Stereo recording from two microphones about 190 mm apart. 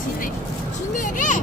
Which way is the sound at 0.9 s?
40° left (ahead or behind).